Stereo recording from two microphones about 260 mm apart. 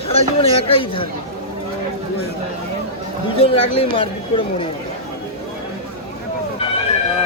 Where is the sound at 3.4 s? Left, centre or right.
Left.